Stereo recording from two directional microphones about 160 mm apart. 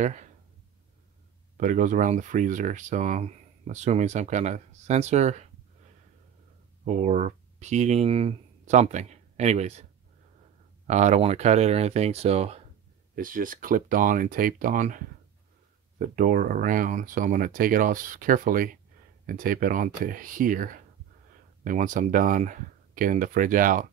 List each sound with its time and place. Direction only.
0.0 s speech: 50° right (ahead or behind)
1.6 s speech: 55° right (ahead or behind)
6.8 s speech: 45° right (ahead or behind)
10.9 s speech: 45° right (ahead or behind)
13.1 s speech: 60° right (ahead or behind)